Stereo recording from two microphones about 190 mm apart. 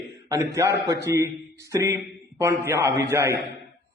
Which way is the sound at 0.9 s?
15° right (ahead or behind).